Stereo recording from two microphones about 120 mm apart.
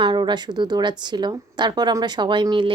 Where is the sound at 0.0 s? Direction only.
40° right (ahead or behind).